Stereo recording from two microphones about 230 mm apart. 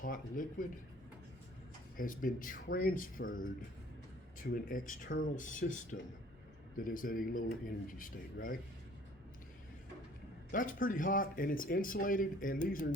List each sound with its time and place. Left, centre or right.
0.0 s speech: left
2.0 s speech: left
10.5 s speech: left